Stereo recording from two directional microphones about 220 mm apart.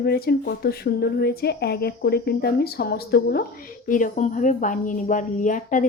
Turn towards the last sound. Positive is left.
turn(degrees=35)  # may be behind; listen again after turning